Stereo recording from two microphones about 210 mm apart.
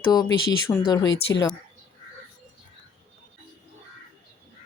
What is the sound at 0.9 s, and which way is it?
Speech, 20° left (ahead or behind).